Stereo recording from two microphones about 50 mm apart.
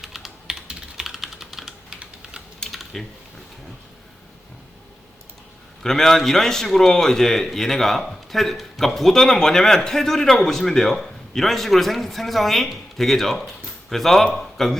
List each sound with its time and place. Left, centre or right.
0.0 s computer keyboard: centre
0.7 s typing: centre
1.9 s typing: centre
2.6 s typing: centre
5.8 s a man's voice: centre